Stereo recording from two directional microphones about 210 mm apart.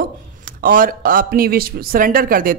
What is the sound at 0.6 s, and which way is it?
Speech, 40° right (ahead or behind).